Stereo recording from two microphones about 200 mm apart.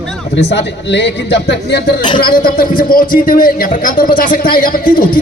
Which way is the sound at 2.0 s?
25° left (ahead or behind).